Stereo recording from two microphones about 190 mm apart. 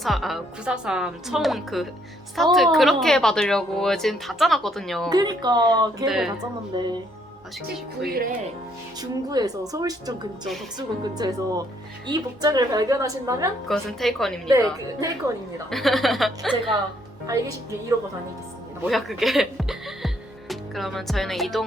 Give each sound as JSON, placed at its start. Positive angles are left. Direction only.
{"t": 0.0, "sound": "a woman's voice", "side_deg": 0}
{"t": 5.0, "sound": "a woman's voice", "side_deg": -20}
{"t": 6.1, "sound": "a woman's voice", "side_deg": 0}
{"t": 6.7, "sound": "a woman's voice", "side_deg": -25}
{"t": 8.0, "sound": "speech", "side_deg": -55}
{"t": 9.0, "sound": "a woman's voice", "side_deg": -20}
{"t": 13.7, "sound": "a woman's voice", "side_deg": 0}
{"t": 15.7, "sound": "a woman's voice", "side_deg": 0}
{"t": 18.9, "sound": "a woman's voice", "side_deg": 0}